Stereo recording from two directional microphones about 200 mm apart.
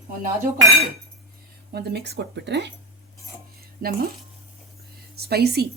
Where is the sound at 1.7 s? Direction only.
55° right (ahead or behind).